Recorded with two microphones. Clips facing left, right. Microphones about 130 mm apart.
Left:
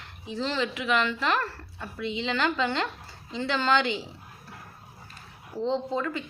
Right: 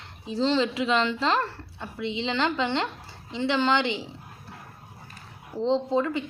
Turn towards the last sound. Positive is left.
turn(degrees=-20)  # may be behind; listen again after turning